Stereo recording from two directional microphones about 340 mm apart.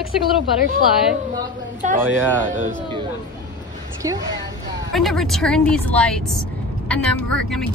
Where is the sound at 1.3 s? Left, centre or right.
Right.